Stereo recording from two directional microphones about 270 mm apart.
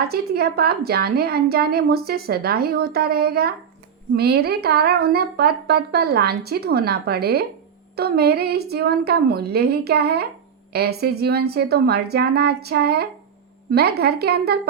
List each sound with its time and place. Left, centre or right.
0.0 s a woman's voice: right